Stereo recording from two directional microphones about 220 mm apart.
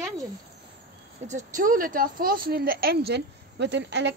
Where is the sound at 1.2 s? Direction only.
35° right (ahead or behind); by 4.1 s 50° right (ahead or behind).